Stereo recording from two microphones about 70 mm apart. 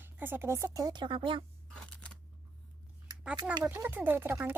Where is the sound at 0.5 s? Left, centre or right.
Right.